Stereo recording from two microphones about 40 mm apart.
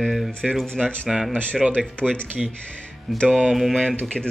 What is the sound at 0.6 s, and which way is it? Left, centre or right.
Speech, centre.